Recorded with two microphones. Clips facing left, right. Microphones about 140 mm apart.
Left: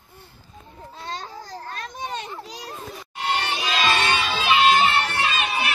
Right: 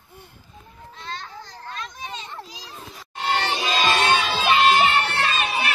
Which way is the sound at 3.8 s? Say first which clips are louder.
Right 2 dB; 45° right (ahead or behind).